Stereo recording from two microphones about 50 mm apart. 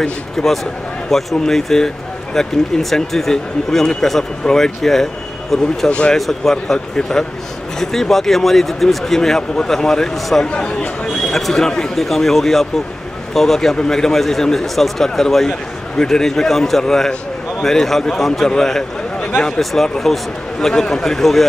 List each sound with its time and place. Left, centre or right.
0.4 s speech: centre
5.9 s speech: left
6.1 s speech: centre
10.4 s speech: left
11.1 s speech: centre
18.6 s a sound: centre
19.4 s speech: centre